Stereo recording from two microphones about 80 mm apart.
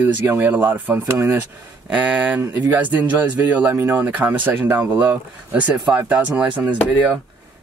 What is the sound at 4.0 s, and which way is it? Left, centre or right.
Speech, right.